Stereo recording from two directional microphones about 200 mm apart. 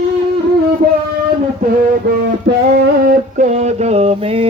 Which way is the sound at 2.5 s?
60° right (ahead or behind).